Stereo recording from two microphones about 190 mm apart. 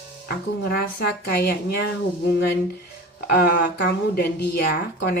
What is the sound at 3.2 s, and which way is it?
A woman's voice, 55° left (ahead or behind).